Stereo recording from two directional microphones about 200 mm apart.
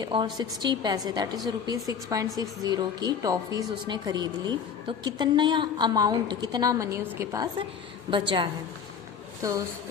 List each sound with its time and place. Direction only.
0.0 s a woman's voice: 20° right (ahead or behind)